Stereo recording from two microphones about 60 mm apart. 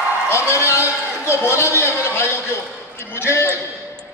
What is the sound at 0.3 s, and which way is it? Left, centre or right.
A man's voice, left.